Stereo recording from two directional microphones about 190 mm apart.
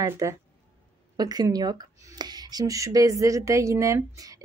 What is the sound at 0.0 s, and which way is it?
Speech, 15° right (ahead or behind).